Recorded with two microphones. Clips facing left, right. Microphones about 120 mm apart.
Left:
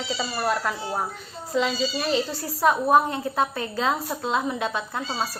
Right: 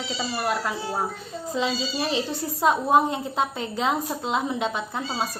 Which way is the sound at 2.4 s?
20° right (ahead or behind).